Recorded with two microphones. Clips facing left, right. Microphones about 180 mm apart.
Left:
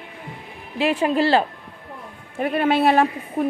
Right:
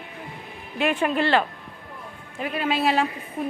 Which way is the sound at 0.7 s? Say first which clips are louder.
Left 3 dB; 30° left (ahead or behind).